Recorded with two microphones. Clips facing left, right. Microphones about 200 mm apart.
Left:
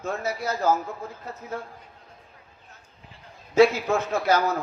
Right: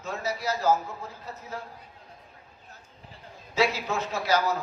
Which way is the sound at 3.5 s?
50° left (ahead or behind).